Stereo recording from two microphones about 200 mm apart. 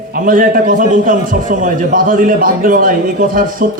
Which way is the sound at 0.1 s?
45° right (ahead or behind).